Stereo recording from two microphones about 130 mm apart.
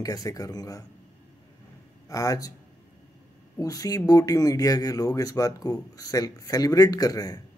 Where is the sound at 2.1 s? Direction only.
25° left (ahead or behind).